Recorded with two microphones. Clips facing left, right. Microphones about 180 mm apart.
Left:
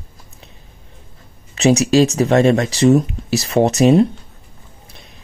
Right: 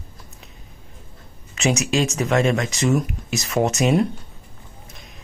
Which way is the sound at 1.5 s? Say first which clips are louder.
Left 8 dB; 35° left (ahead or behind).